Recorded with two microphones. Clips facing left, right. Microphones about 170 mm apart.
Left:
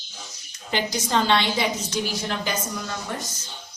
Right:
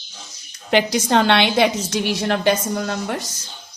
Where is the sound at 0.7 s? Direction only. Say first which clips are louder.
Right 8 dB; 70° right (ahead or behind).